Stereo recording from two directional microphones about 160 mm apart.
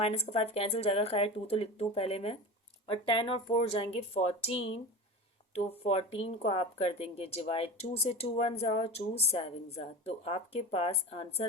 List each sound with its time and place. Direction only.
0.0 s speech: 40° left (ahead or behind)
5.5 s speech: 40° left (ahead or behind)